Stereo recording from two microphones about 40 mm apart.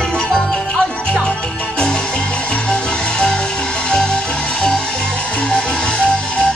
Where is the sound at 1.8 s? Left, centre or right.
Left.